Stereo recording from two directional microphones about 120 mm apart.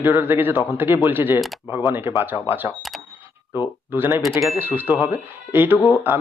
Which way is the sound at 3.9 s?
15° right (ahead or behind).